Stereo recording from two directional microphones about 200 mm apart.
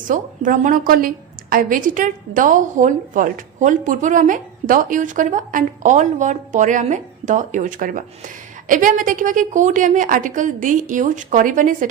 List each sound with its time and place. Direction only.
0.0 s a woman's voice: 40° right (ahead or behind)